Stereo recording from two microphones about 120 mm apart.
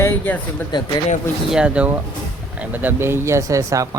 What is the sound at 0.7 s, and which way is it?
Speech, 35° left (ahead or behind).